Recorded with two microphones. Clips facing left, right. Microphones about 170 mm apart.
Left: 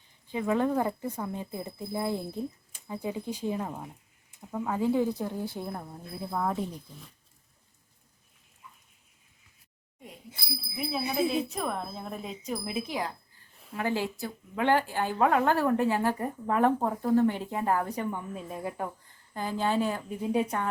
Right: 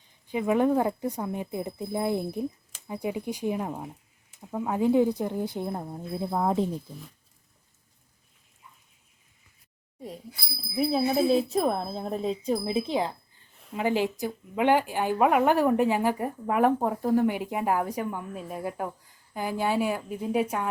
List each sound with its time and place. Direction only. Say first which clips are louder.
0.3 s a woman's voice: right 4 dB; 15° right (ahead or behind)
10.8 s a woman's voice: right 6 dB; 35° right (ahead or behind); by 20.7 s 5° right (ahead or behind)